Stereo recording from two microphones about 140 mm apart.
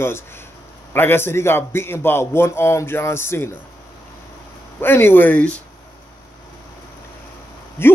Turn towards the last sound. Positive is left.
turn(degrees=15)  # may be behind; listen again after turning